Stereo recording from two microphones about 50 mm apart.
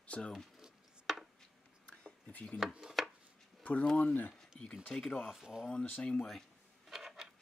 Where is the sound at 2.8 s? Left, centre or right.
Centre.